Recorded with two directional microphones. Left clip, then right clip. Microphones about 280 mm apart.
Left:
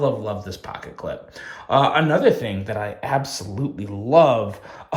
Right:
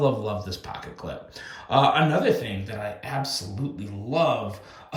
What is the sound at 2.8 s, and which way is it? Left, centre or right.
Speech, left.